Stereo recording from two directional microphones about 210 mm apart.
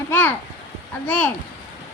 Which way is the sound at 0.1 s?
10° left (ahead or behind).